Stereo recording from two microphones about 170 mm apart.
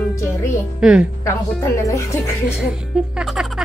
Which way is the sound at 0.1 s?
15° left (ahead or behind).